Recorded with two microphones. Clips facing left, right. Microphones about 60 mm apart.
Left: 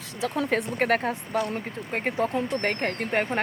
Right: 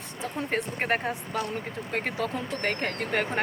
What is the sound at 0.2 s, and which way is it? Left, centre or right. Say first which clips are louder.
Speech: left 4 dB; left.